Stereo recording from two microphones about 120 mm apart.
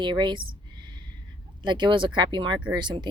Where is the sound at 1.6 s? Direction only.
40° right (ahead or behind).